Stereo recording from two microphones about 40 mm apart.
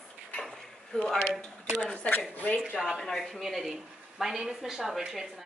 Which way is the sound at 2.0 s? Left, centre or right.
Left.